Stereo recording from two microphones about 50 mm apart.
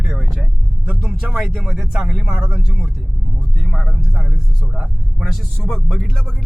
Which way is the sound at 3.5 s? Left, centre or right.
Centre.